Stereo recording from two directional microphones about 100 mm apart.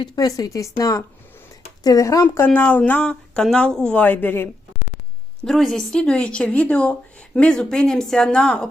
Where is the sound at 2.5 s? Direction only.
15° left (ahead or behind).